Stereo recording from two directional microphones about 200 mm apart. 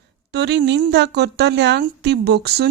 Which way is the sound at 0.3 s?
55° right (ahead or behind).